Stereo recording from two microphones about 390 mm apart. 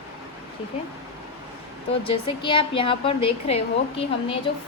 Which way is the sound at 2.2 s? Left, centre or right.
Centre.